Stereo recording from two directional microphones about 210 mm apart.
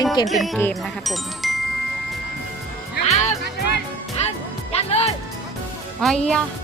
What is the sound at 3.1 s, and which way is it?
Music, 35° left (ahead or behind).